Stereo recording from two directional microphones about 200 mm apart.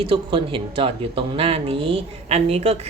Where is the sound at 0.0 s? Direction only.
25° right (ahead or behind).